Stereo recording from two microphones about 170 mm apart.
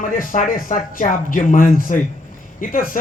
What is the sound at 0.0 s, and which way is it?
A man's voice, 55° left (ahead or behind).